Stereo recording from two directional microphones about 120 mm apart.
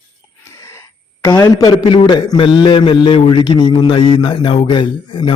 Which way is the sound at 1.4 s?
30° left (ahead or behind).